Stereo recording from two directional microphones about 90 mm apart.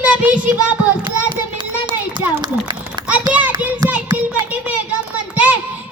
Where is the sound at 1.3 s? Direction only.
60° right (ahead or behind).